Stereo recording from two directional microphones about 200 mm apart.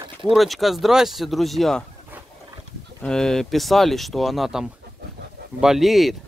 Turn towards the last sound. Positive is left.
turn(degrees=0)  # may be behind; listen again after turning